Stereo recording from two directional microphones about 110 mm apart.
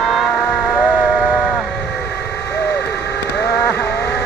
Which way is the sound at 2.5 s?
15° left (ahead or behind).